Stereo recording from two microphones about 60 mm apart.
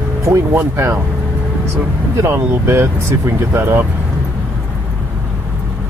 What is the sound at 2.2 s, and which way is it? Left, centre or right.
Speech, right.